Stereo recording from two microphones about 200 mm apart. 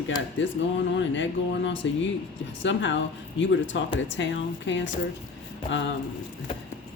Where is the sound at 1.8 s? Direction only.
70° left (ahead or behind).